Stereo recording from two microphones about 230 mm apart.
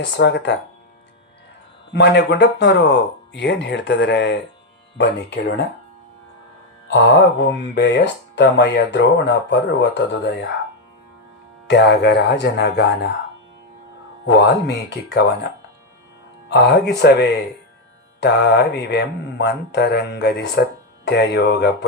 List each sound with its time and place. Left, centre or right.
0.0 s speech: left
1.9 s speech: left
6.9 s speech: left
11.7 s speech: left
14.3 s speech: left
16.5 s speech: left